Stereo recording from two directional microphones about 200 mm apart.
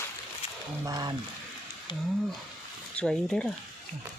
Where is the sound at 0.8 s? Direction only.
20° right (ahead or behind).